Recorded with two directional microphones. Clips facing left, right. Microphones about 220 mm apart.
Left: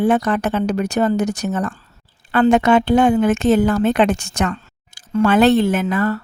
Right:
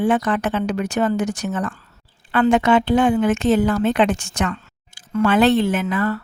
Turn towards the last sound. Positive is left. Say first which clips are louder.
# left 2 dB
turn(degrees=40)  # may be behind; listen again after turning